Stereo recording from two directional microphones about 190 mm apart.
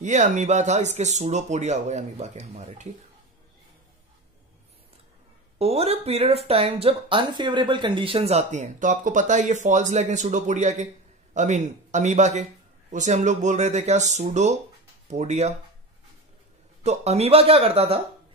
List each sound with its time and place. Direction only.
0.0 s speech: 40° right (ahead or behind)
5.6 s speech: 35° right (ahead or behind)
16.8 s speech: 35° right (ahead or behind)